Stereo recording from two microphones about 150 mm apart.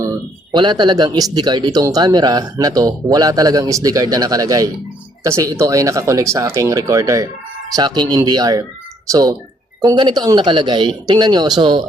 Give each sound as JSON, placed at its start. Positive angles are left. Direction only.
{"t": 0.5, "sound": "speech", "side_deg": -30}